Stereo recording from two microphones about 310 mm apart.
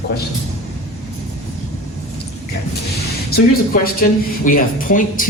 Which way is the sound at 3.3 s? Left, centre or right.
Left.